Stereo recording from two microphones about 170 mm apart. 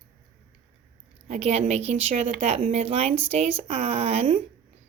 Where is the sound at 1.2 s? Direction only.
40° right (ahead or behind).